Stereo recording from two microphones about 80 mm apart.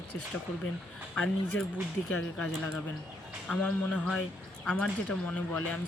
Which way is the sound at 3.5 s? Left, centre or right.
Centre.